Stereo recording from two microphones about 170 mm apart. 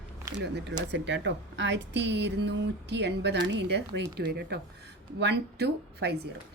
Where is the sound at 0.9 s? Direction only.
90° right.